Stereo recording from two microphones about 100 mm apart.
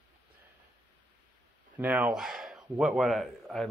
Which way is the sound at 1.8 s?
15° right (ahead or behind).